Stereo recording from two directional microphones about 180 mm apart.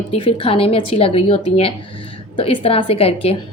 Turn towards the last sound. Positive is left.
turn(degrees=35)  # may be behind; listen again after turning